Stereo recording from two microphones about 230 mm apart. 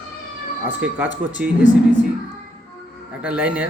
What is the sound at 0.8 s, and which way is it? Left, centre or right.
Speech, centre.